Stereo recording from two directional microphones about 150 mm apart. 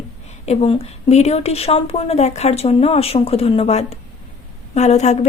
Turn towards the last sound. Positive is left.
turn(degrees=50)  # may be behind; listen again after turning